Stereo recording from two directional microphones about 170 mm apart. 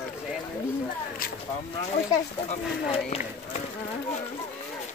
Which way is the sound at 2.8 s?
40° left (ahead or behind).